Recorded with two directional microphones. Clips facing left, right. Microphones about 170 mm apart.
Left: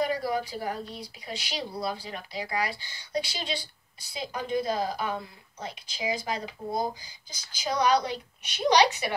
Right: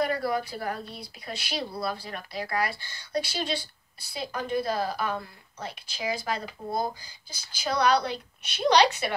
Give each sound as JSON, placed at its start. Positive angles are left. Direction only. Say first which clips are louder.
{"t": 0.0, "sound": "a woman's voice", "louder": "right 1 dB", "side_deg": 15}